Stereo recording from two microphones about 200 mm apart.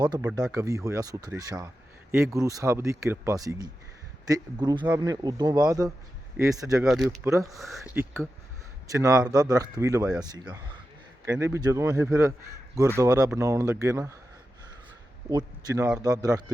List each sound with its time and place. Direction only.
0.0 s speech: 20° right (ahead or behind)
6.8 s speech: centre (ahead or behind); by 10.0 s 15° right (ahead or behind)
11.3 s speech: 15° right (ahead or behind)
15.3 s speech: 20° right (ahead or behind)